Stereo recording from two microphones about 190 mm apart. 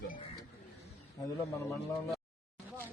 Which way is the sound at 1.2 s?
15° left (ahead or behind).